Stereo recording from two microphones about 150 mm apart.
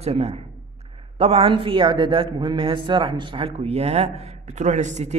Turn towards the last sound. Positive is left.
turn(degrees=-50)  # may be behind; listen again after turning